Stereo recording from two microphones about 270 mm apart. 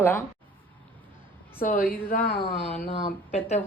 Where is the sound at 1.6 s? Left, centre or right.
Left.